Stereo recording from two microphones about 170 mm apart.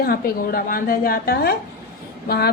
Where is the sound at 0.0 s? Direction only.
65° left (ahead or behind).